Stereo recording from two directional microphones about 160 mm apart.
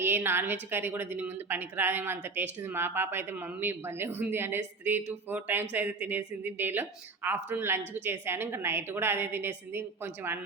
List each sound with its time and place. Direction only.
0.0 s a woman's voice: 15° right (ahead or behind)